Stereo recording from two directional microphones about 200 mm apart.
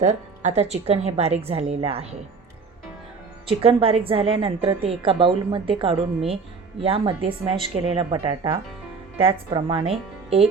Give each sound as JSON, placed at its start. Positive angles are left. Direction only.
{"t": 0.0, "sound": "a woman's voice", "side_deg": -35}
{"t": 3.6, "sound": "a woman's voice", "side_deg": -25}